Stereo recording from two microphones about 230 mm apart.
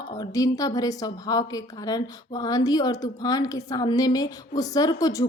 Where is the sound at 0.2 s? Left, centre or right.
Centre.